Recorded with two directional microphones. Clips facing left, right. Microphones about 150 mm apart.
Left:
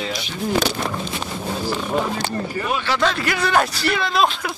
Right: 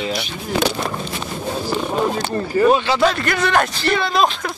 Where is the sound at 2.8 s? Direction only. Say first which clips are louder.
Right 4 dB; 20° right (ahead or behind).